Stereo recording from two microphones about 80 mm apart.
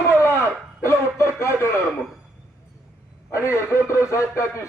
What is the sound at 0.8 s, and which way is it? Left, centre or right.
Speech, left.